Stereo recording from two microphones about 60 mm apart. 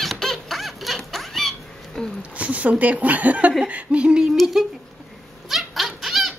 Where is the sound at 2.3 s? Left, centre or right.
Right.